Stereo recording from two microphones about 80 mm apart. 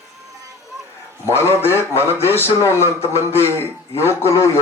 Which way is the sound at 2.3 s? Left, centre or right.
Left.